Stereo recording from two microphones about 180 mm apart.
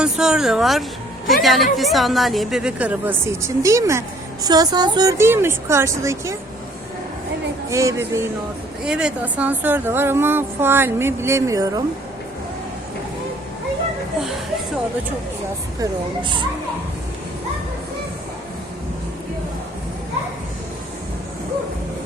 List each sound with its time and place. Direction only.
0.0 s a woman's voice: 5° right (ahead or behind)
7.7 s a woman's voice: 15° right (ahead or behind)
8.8 s a woman's voice: 5° right (ahead or behind)
15.8 s speech: 25° right (ahead or behind)